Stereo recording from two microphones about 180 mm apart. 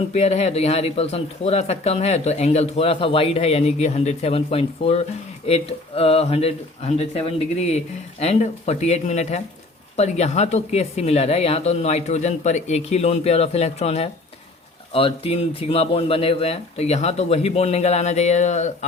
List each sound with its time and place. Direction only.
0.1 s speech: 35° left (ahead or behind)